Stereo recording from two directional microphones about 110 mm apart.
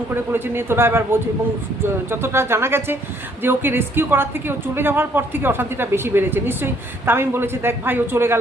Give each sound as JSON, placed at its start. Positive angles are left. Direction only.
{"t": 0.1, "sound": "a woman's voice", "side_deg": -20}